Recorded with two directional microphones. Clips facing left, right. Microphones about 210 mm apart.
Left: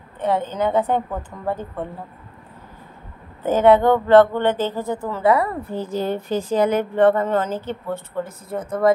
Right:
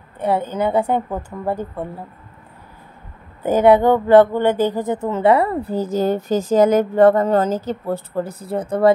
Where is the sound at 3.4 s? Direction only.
10° right (ahead or behind); by 5.8 s 30° right (ahead or behind).